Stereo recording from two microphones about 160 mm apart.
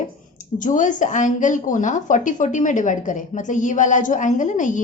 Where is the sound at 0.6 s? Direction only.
55° left (ahead or behind).